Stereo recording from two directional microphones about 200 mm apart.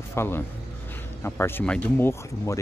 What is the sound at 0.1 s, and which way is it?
A man's voice, 10° left (ahead or behind).